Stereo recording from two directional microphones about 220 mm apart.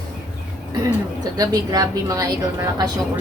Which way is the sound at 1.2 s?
15° right (ahead or behind).